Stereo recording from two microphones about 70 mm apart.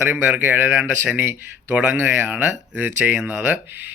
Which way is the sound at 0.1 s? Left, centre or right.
Right.